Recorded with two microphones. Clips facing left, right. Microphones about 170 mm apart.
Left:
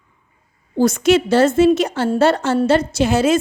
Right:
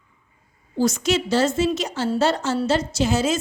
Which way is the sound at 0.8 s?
55° left (ahead or behind).